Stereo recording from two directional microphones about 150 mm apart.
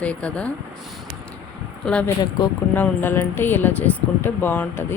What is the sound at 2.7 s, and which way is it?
Speech, 10° left (ahead or behind).